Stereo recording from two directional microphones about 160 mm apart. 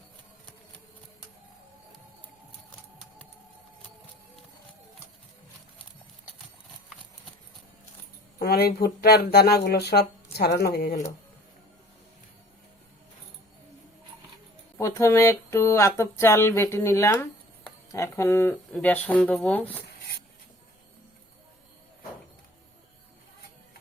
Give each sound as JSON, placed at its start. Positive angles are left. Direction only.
{"t": 8.4, "sound": "speech", "side_deg": 85}
{"t": 14.8, "sound": "speech", "side_deg": 15}